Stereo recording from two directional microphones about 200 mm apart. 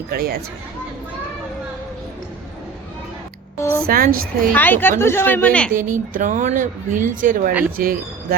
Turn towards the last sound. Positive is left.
turn(degrees=-45)  # may be behind; listen again after turning